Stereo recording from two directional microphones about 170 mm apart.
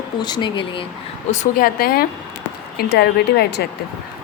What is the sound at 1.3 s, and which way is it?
A woman's voice, 50° left (ahead or behind).